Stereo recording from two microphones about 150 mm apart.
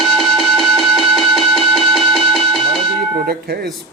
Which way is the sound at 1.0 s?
35° right (ahead or behind).